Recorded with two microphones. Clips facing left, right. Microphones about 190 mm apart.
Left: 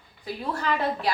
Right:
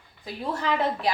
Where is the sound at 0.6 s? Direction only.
20° right (ahead or behind).